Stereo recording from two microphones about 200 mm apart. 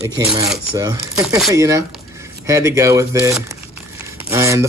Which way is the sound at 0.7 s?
15° right (ahead or behind).